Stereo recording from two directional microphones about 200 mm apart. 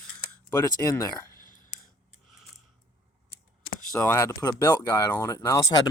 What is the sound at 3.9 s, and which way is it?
Speech, 10° left (ahead or behind).